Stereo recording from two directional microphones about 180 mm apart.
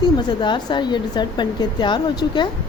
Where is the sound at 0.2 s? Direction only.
25° left (ahead or behind).